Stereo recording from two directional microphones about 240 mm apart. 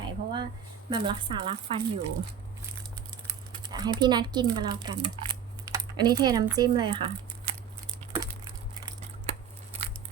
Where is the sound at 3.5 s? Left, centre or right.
Centre.